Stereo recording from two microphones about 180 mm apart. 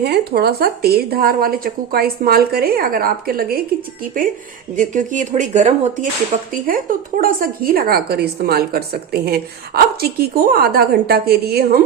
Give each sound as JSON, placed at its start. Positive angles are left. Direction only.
{"t": 0.0, "sound": "a woman's voice", "side_deg": -60}